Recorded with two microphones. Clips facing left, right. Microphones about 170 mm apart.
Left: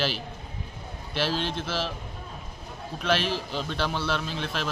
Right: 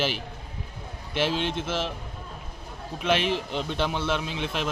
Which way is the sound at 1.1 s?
15° right (ahead or behind).